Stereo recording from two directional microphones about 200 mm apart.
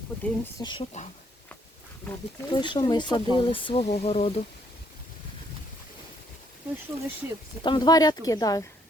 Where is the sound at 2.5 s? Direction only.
20° left (ahead or behind).